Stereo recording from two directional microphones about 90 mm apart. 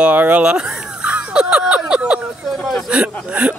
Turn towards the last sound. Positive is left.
turn(degrees=-15)  # may be behind; listen again after turning